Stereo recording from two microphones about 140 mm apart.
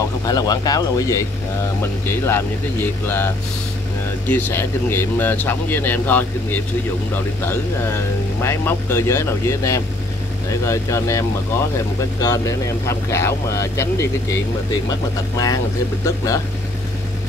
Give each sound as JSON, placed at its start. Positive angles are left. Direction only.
{"t": 0.2, "sound": "speech", "side_deg": 25}
{"t": 4.3, "sound": "speech", "side_deg": 15}